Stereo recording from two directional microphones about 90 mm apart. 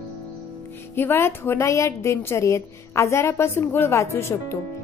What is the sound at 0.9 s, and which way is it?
A woman's voice, 25° left (ahead or behind).